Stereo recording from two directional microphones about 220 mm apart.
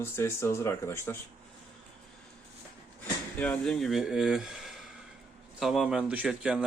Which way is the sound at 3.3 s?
5° left (ahead or behind).